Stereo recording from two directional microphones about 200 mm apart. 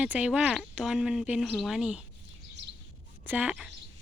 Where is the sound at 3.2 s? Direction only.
10° right (ahead or behind).